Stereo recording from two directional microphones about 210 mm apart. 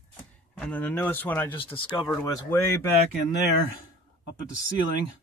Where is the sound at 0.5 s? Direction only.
5° left (ahead or behind).